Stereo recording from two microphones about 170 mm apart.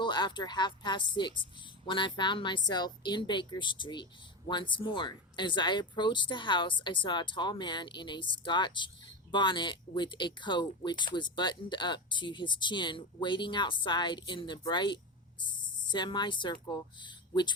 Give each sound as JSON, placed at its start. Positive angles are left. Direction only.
{"t": 0.0, "sound": "speech", "side_deg": 25}